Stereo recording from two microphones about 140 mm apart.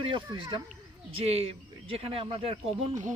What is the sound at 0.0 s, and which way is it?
Speech, 35° right (ahead or behind).